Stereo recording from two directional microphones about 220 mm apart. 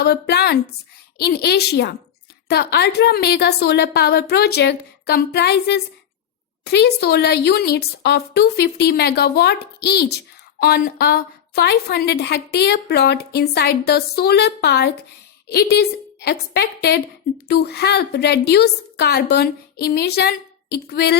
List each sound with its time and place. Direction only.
0.0 s a woman's voice: 50° left (ahead or behind)